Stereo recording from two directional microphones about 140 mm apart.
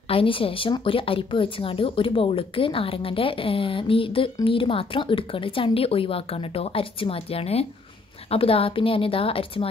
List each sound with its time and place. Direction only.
0.1 s a woman's voice: 40° left (ahead or behind)